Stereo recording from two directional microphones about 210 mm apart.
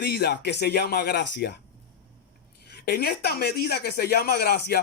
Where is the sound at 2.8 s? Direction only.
50° left (ahead or behind).